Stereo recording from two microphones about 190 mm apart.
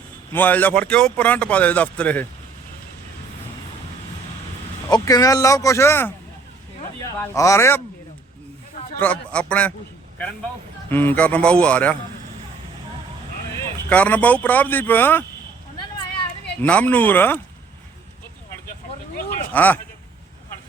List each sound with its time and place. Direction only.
0.3 s speech: 10° left (ahead or behind)
4.9 s speech: 20° left (ahead or behind)
9.0 s speech: 5° left (ahead or behind)
10.8 s speech: 10° left (ahead or behind)
13.9 s speech: 10° left (ahead or behind)
16.6 s speech: 5° left (ahead or behind)
19.5 s speech: 10° left (ahead or behind)